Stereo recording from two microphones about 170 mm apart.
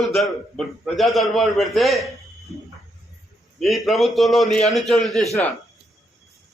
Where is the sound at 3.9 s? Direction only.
Centre (ahead or behind).